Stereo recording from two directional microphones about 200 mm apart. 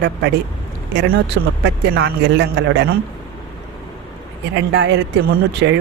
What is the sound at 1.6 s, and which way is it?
Speech, 60° right (ahead or behind).